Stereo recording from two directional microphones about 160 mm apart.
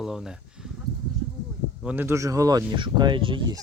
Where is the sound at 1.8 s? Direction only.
10° right (ahead or behind); by 3.6 s 30° right (ahead or behind).